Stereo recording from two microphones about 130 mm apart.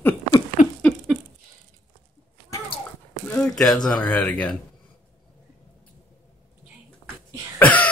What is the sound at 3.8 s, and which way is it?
Speech, 10° left (ahead or behind).